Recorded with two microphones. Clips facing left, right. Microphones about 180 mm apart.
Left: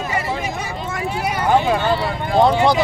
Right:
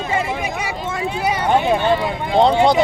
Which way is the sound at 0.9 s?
25° right (ahead or behind).